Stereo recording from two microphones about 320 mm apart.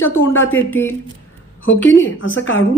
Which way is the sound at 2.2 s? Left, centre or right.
Left.